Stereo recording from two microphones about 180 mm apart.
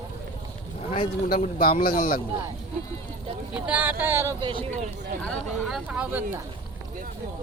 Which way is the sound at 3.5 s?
5° right (ahead or behind).